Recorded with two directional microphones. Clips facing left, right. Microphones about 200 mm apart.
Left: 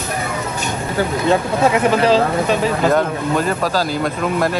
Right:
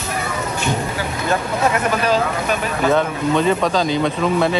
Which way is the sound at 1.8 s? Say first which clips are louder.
Left 4 dB; 30° left (ahead or behind).